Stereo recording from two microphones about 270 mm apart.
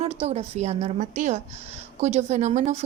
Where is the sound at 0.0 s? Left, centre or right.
Right.